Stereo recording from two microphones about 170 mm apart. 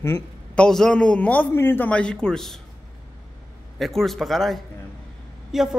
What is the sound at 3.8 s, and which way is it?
A man's voice, centre (ahead or behind).